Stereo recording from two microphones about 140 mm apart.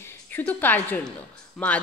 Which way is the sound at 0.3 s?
15° left (ahead or behind).